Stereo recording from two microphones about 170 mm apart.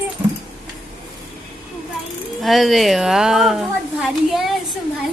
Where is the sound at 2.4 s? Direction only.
Centre (ahead or behind).